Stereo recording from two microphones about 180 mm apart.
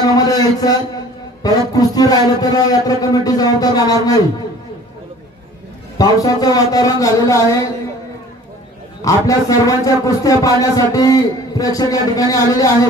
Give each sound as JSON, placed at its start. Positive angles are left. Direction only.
{"t": 0.0, "sound": "a man's voice", "side_deg": 20}
{"t": 5.9, "sound": "a man's voice", "side_deg": 20}
{"t": 9.0, "sound": "a man's voice", "side_deg": 20}